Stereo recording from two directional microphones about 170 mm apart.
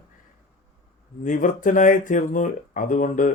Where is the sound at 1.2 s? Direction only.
50° left (ahead or behind).